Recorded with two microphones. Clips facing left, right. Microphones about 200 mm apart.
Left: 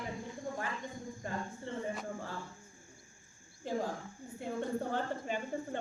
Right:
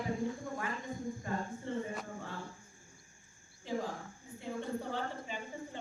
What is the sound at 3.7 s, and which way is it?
Cricket, 45° left (ahead or behind).